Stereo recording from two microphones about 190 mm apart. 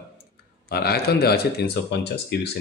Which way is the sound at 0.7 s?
55° left (ahead or behind).